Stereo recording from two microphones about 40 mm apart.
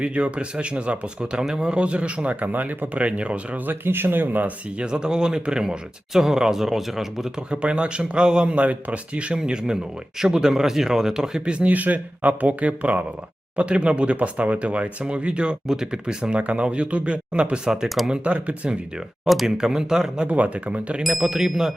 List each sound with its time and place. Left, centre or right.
0.0 s speech: right
3.7 s speech: right
4.8 s speech: right
7.5 s speech: right
11.7 s speech: right
15.6 s speech: centre
17.8 s speech: centre
18.1 s speech: right
18.7 s speech: centre
20.2 s speech: right
21.2 s speech: centre